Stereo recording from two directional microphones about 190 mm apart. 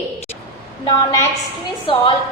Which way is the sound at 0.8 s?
15° left (ahead or behind).